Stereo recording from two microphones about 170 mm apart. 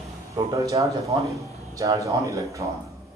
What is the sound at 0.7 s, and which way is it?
Speech, 20° right (ahead or behind).